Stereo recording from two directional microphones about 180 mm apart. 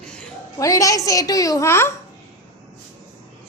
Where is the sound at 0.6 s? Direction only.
20° left (ahead or behind).